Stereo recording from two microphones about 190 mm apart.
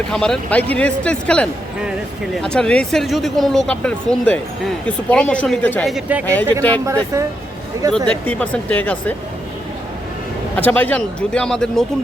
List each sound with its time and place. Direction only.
0.1 s speech: 5° left (ahead or behind)
5.9 s speech: 10° right (ahead or behind)
6.2 s speech: 10° left (ahead or behind)
7.8 s speech: 20° right (ahead or behind)
8.2 s speech: 5° left (ahead or behind)
10.6 s speech: 10° left (ahead or behind)